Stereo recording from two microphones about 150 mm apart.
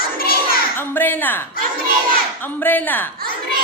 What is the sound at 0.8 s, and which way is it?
A woman's voice, 15° left (ahead or behind).